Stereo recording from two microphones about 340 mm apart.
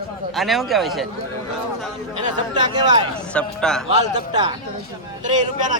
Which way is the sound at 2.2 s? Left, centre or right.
Centre.